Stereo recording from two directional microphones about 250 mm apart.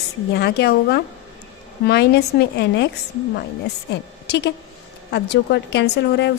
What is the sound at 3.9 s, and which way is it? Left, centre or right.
A woman's voice, left.